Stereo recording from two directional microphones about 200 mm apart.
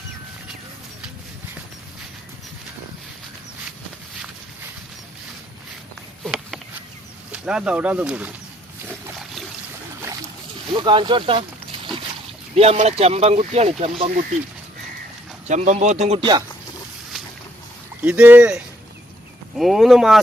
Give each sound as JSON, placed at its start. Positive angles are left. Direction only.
{"t": 6.2, "sound": "a sound", "side_deg": 0}
{"t": 7.3, "sound": "speech", "side_deg": -5}
{"t": 10.7, "sound": "a sound", "side_deg": -25}
{"t": 12.5, "sound": "speech", "side_deg": -30}
{"t": 15.4, "sound": "speech", "side_deg": -35}
{"t": 18.0, "sound": "speech", "side_deg": -10}